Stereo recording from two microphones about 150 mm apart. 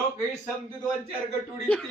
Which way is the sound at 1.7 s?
5° left (ahead or behind).